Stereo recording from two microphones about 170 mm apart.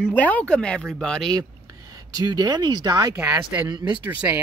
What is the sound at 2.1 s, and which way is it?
Speech, 20° right (ahead or behind).